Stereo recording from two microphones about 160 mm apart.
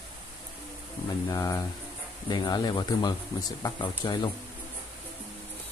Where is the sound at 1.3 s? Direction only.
20° left (ahead or behind).